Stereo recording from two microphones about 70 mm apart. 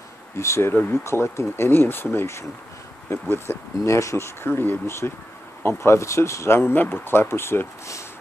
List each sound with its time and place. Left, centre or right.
0.4 s speech: left
4.5 s speech: left